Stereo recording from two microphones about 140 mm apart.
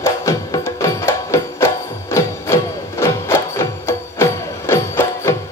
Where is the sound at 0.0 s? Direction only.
20° left (ahead or behind).